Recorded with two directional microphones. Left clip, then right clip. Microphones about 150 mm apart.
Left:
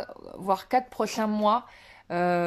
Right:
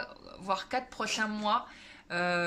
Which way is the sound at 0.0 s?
40° left (ahead or behind).